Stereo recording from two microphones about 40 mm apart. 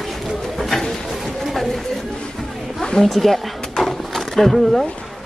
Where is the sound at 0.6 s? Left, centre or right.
Centre.